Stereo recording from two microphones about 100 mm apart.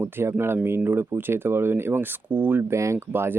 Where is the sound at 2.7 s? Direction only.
30° right (ahead or behind).